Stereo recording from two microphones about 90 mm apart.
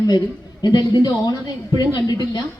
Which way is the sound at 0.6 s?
50° left (ahead or behind).